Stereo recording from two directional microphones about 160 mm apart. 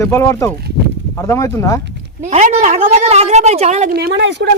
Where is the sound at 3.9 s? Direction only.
90° right.